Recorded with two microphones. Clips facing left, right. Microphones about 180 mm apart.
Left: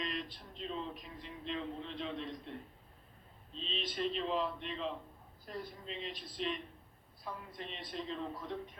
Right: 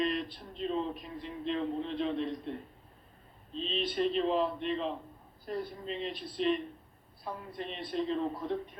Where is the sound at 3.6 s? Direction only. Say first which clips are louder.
Right 7 dB; 55° right (ahead or behind).